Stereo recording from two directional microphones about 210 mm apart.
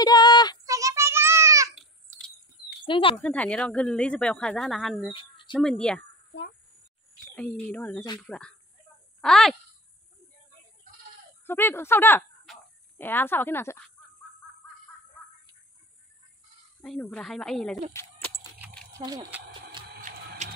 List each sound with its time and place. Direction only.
0.0 s child singing: 20° left (ahead or behind)
0.7 s child singing: 15° right (ahead or behind)
2.1 s a sound: 5° left (ahead or behind)
2.8 s speech: 25° left (ahead or behind)
3.2 s speech: 5° left (ahead or behind)
5.1 s speech: 25° left (ahead or behind)
5.6 s speech: 5° left (ahead or behind)
7.3 s speech: 5° left (ahead or behind)
11.4 s speech: 10° left (ahead or behind)
16.8 s speech: 5° left (ahead or behind)
17.9 s speech: 15° left (ahead or behind)
18.9 s a sound: 15° right (ahead or behind)
19.9 s a sound: 40° right (ahead or behind)